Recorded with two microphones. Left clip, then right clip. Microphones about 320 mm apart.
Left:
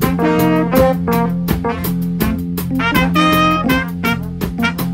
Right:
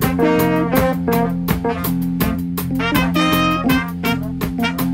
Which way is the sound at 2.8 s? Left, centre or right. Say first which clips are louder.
Left 4 dB; centre.